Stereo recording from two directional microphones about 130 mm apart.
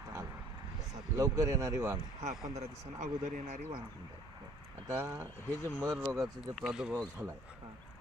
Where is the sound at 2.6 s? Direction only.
70° right (ahead or behind).